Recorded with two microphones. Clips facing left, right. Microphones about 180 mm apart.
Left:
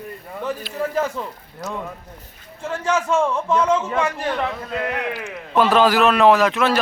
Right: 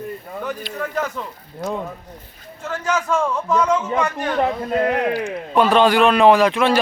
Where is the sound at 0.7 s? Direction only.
30° left (ahead or behind).